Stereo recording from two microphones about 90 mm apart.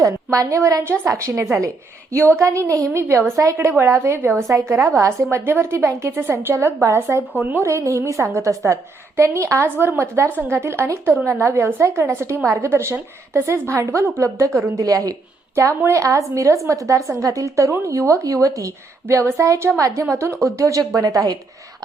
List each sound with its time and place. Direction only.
0.0 s a woman's voice: 35° right (ahead or behind)